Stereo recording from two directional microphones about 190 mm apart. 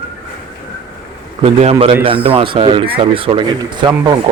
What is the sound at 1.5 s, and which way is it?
Speech, 35° right (ahead or behind).